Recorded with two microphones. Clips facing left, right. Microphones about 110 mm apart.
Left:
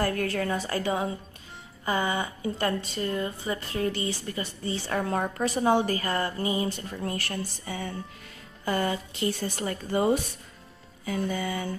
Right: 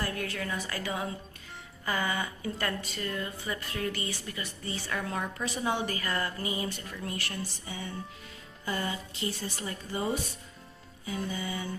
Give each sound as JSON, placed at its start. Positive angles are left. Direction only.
{"t": 0.0, "sound": "a woman's voice", "side_deg": 45}
{"t": 11.2, "sound": "speech", "side_deg": 60}